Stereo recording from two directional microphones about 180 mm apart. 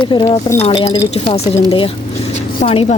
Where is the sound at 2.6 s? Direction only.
35° left (ahead or behind).